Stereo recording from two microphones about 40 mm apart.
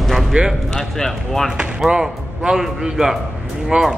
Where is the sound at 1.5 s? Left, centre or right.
Right.